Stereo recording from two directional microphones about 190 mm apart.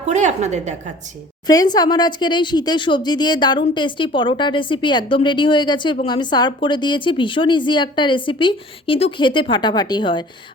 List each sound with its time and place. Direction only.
0.1 s a woman's voice: 40° right (ahead or behind)
1.5 s speech: 20° left (ahead or behind)